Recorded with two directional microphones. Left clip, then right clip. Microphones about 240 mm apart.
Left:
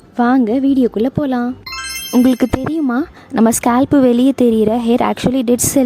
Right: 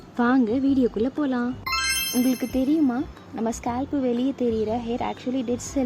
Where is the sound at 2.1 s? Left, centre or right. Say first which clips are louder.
Left 11 dB; left.